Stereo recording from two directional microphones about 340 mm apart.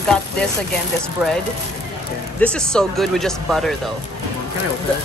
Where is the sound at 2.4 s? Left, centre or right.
Centre.